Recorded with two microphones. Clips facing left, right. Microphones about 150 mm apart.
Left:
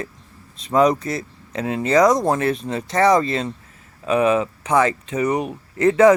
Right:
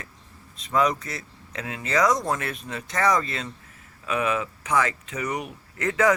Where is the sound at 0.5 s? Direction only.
35° left (ahead or behind).